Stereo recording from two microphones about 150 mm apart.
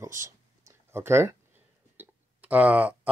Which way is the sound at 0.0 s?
20° right (ahead or behind).